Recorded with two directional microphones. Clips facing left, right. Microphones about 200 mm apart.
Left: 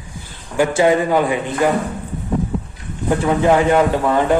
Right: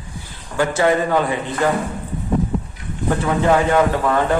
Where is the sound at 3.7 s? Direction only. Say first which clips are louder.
Left 2 dB; 15° left (ahead or behind).